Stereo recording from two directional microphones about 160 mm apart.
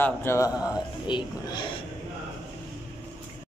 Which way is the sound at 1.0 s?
30° left (ahead or behind).